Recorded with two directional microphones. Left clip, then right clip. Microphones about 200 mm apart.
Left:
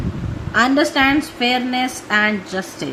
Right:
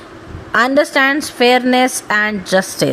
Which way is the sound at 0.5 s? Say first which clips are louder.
Right 3 dB; 50° right (ahead or behind).